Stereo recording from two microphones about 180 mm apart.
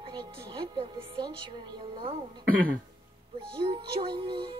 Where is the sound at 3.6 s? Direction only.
25° right (ahead or behind).